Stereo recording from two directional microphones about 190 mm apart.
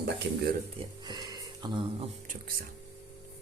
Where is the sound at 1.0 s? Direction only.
20° right (ahead or behind).